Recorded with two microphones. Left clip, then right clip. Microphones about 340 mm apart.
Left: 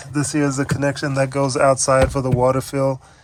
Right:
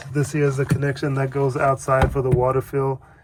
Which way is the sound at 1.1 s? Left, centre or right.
Centre.